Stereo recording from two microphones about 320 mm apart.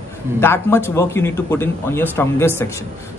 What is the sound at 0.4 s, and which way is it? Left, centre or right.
A man's voice, centre.